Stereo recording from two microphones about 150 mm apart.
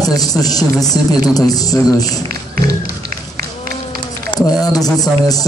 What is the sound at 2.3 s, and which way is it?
Music, 90° right.